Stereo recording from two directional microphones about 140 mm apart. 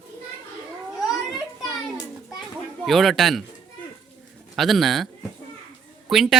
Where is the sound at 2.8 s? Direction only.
Centre (ahead or behind).